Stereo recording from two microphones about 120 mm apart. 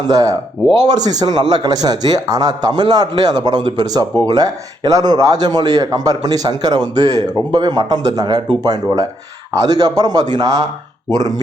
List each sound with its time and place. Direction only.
0.1 s a man's voice: 30° right (ahead or behind)